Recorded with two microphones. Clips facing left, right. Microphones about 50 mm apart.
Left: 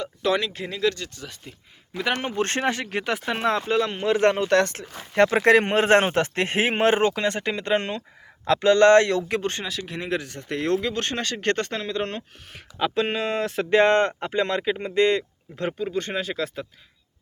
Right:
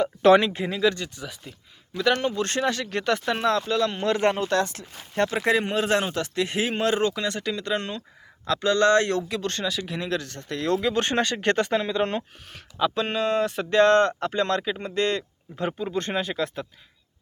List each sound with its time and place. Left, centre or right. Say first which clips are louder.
0.2 s speech: right 7 dB; right
0.6 s speech: right 2 dB; centre
1.5 s a man's voice: even; centre
2.3 s speech: left 1 dB; left
2.9 s speech: right 1 dB; centre
3.4 s speech: left 2 dB; left
4.4 s speech: left 4 dB; left
9.4 s speech: left 1 dB; centre
9.6 s speech: right 2 dB; centre
10.1 s speech: left 1 dB; centre
10.9 s speech: right 4 dB; centre
12.9 s speech: even; centre
13.7 s speech: even; centre
15.5 s speech: left 1 dB; centre